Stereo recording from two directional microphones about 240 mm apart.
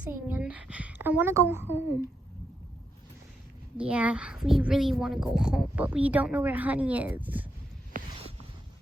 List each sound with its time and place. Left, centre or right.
0.0 s speech: centre
3.8 s a woman's voice: centre
7.9 s a sound: right